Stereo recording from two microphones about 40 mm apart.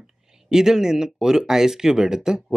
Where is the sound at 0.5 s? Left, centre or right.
Centre.